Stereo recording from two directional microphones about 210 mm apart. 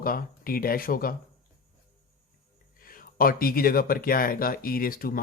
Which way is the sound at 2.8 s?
45° left (ahead or behind).